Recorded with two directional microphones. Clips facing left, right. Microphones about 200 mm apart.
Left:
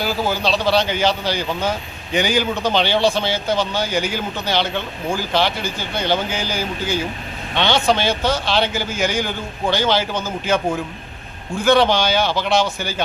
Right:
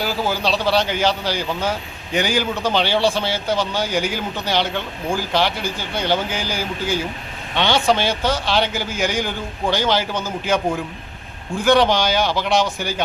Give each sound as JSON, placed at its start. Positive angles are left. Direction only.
{"t": 0.0, "sound": "a man's voice", "side_deg": -10}